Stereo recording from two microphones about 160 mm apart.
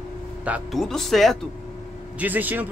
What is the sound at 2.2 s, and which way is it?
Speech, 10° right (ahead or behind).